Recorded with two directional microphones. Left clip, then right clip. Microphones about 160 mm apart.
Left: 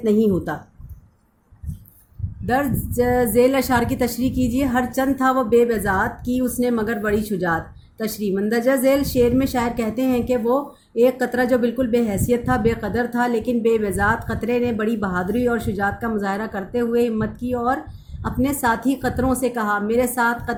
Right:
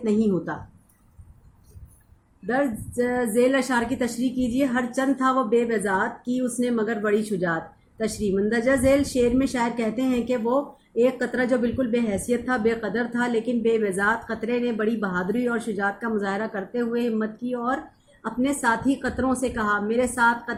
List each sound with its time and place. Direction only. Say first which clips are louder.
0.0 s a woman's voice: left 5 dB; 45° left (ahead or behind)
2.5 s a woman's voice: left 3 dB; 55° left (ahead or behind)